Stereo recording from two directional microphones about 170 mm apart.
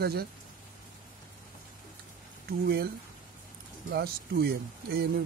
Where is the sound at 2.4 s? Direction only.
65° right (ahead or behind).